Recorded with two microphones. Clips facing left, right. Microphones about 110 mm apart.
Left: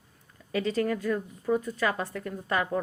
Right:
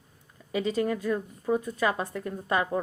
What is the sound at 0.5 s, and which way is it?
A woman's voice, 15° right (ahead or behind).